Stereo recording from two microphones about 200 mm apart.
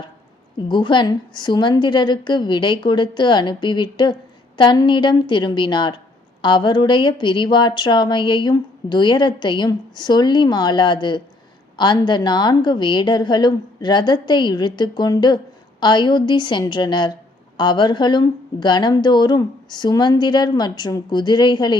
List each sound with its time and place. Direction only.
0.7 s a woman's voice: 25° left (ahead or behind)